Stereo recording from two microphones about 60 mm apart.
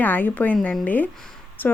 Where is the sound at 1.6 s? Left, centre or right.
Left.